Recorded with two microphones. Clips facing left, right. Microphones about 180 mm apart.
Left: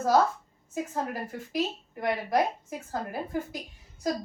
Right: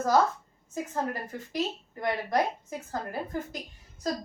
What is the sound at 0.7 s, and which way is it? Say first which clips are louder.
A woman's voice: even; 5° left (ahead or behind).